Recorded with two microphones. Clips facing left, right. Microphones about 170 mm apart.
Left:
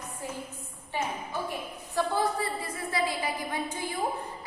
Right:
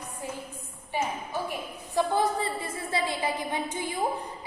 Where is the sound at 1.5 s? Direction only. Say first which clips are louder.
Right 3 dB; 20° right (ahead or behind).